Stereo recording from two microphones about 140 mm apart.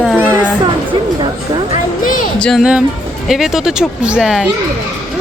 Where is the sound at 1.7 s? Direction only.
80° left.